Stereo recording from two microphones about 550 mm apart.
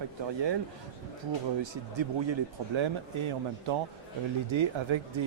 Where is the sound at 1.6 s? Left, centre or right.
Right.